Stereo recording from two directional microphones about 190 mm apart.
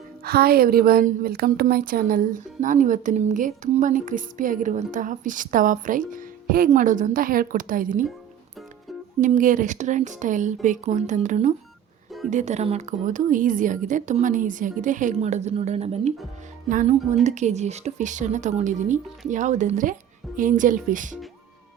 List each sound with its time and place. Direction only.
0.3 s a woman's voice: 55° right (ahead or behind)
9.2 s a woman's voice: 45° right (ahead or behind)